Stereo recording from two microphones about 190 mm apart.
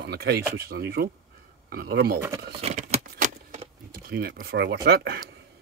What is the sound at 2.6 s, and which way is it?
Keys jangling, 35° right (ahead or behind).